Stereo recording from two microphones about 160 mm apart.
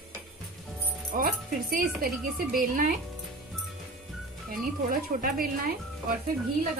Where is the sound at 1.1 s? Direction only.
60° right (ahead or behind).